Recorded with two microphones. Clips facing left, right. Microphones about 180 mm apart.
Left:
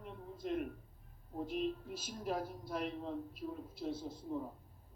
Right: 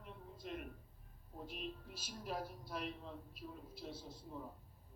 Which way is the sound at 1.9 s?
50° left (ahead or behind).